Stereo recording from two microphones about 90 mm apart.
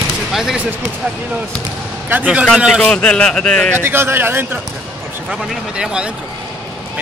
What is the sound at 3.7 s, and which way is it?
Speech, 25° right (ahead or behind).